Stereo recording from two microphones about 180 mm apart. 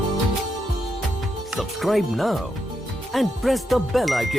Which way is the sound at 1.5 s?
Centre (ahead or behind).